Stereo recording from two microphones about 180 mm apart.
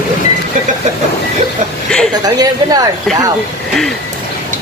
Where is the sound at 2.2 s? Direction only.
20° right (ahead or behind).